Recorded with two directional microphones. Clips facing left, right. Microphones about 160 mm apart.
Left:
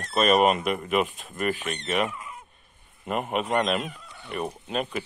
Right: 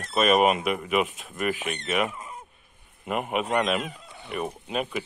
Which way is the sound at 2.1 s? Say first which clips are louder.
Even; 35° right (ahead or behind).